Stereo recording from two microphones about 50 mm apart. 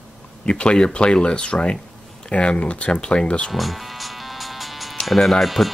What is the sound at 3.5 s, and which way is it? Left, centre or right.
Music, centre.